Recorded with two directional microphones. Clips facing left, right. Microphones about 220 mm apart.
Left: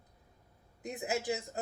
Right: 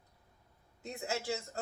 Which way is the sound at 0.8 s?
15° left (ahead or behind).